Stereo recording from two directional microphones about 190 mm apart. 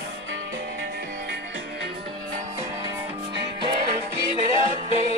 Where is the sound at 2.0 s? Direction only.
15° right (ahead or behind).